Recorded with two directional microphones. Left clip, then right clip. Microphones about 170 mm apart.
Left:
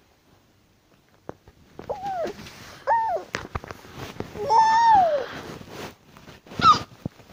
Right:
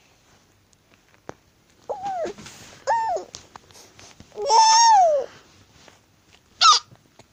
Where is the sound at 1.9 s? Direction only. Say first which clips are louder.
Right 1 dB; 25° right (ahead or behind).